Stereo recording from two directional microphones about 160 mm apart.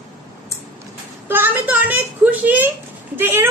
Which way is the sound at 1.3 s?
15° right (ahead or behind).